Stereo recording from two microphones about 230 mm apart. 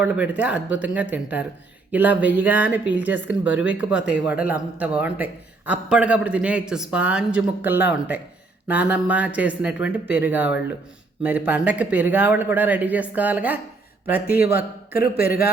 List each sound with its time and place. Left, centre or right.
0.0 s a man's voice: centre
14.3 s a man's voice: left